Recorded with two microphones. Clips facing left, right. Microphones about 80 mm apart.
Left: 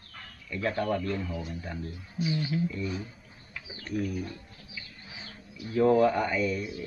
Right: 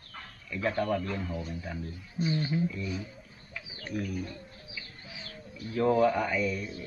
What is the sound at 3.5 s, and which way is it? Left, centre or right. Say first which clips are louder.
Bird: left 3 dB; centre.